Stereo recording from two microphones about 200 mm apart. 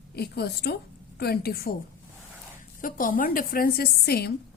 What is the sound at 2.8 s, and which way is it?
A woman's voice, 45° left (ahead or behind).